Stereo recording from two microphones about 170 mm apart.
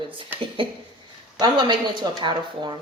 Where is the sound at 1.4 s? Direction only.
25° right (ahead or behind).